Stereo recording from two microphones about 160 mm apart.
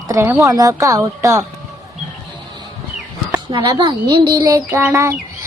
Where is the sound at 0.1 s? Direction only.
15° right (ahead or behind).